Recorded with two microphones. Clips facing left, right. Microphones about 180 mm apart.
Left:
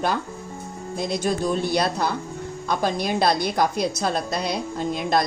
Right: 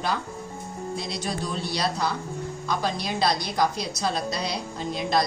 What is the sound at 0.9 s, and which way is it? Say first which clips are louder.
A woman's voice: left 8 dB; 50° left (ahead or behind).